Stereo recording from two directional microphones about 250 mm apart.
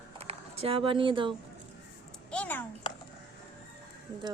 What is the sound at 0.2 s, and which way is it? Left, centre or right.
Speech, right.